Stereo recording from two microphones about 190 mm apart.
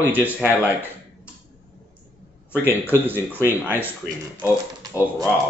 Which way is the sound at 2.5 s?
10° right (ahead or behind).